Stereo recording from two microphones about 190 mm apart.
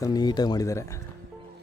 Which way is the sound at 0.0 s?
20° left (ahead or behind).